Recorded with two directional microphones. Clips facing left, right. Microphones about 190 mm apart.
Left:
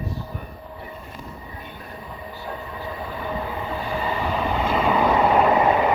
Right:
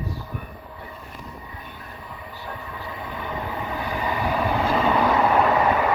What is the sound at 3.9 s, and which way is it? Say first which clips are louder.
Vehicle: right 1 dB; 15° right (ahead or behind).